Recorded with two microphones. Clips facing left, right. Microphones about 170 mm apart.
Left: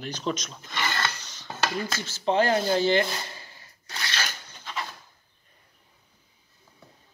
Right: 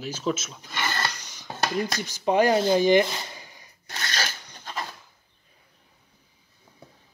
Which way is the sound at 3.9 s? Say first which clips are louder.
Right 2 dB; 40° right (ahead or behind).